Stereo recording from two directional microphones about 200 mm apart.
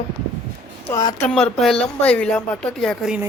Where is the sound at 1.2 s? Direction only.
5° left (ahead or behind).